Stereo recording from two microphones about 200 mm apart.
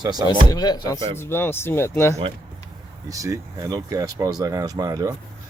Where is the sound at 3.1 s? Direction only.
15° right (ahead or behind).